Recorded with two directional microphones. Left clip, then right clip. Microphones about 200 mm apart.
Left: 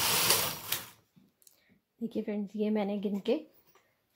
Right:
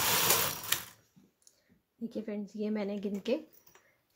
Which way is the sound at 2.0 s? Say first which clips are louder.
Left 3 dB; 40° left (ahead or behind).